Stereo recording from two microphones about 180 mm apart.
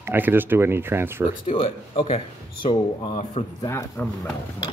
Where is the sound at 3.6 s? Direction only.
15° left (ahead or behind).